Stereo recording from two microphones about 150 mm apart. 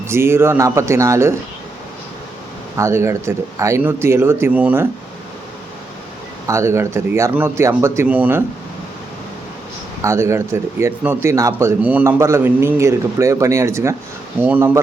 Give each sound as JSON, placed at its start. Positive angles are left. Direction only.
{"t": 0.1, "sound": "speech", "side_deg": -15}
{"t": 2.7, "sound": "speech", "side_deg": -20}
{"t": 6.5, "sound": "speech", "side_deg": -20}
{"t": 10.0, "sound": "speech", "side_deg": -20}